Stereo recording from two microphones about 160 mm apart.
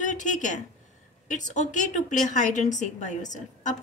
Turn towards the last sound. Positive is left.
turn(degrees=50)  # may be behind; listen again after turning